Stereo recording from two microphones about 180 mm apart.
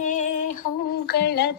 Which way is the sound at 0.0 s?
45° left (ahead or behind).